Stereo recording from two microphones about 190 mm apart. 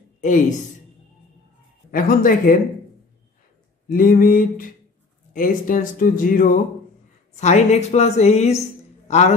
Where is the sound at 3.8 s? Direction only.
45° left (ahead or behind).